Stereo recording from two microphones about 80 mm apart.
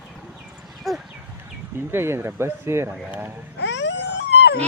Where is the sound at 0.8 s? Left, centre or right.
Centre.